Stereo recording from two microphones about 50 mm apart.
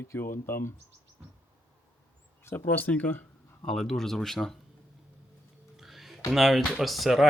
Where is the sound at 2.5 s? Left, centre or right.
Left.